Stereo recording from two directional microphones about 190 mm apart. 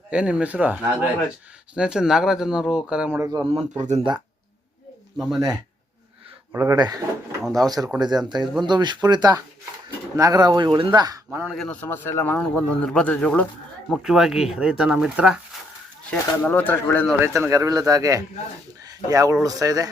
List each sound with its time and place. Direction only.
0.1 s speech: 5° right (ahead or behind)
3.2 s a man's voice: 20° right (ahead or behind)
3.8 s speech: 35° right (ahead or behind)
5.1 s speech: centre (ahead or behind)
6.5 s speech: 15° right (ahead or behind)
7.4 s speech: centre (ahead or behind)
8.2 s a man's voice: 20° right (ahead or behind)
11.5 s a man's voice: 5° left (ahead or behind)
16.0 s a man's voice: 10° left (ahead or behind)
17.2 s a man's voice: 10° right (ahead or behind)